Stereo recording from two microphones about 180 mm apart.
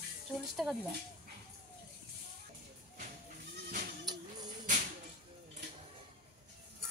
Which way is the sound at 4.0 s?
20° right (ahead or behind).